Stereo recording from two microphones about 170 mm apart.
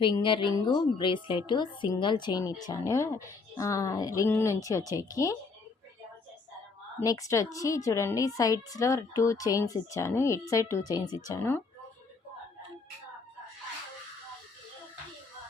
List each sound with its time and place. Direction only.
0.0 s a woman's voice: 30° left (ahead or behind)
7.0 s a woman's voice: 20° left (ahead or behind)